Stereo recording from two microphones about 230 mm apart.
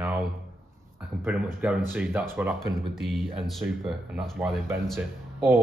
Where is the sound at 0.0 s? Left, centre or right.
Centre.